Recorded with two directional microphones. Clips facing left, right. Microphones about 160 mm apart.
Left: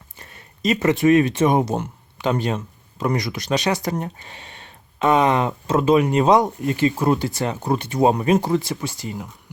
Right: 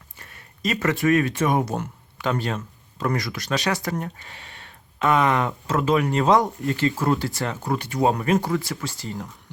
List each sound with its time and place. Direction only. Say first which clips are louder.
0.2 s speech: left 3 dB; 20° left (ahead or behind)